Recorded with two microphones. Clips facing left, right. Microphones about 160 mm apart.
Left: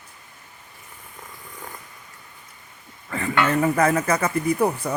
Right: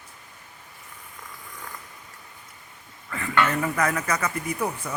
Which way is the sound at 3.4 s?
30° left (ahead or behind).